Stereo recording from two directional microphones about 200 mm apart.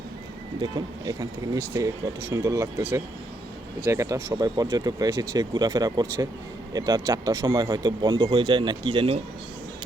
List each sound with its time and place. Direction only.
0.6 s speech: 20° right (ahead or behind)